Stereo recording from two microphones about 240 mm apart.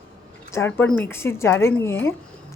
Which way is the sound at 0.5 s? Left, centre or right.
Centre.